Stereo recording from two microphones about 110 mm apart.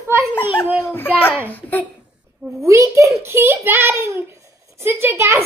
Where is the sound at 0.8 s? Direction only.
20° left (ahead or behind).